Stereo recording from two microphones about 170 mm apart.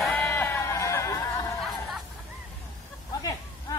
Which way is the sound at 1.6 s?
Centre (ahead or behind).